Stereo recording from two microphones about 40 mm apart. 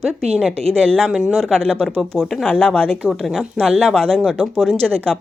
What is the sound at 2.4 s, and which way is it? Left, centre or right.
Speech, left.